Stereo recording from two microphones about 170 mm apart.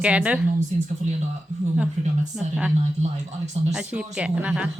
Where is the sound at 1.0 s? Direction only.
45° right (ahead or behind).